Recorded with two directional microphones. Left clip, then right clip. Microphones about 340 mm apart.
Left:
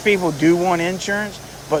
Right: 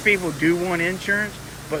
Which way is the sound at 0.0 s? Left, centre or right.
Centre.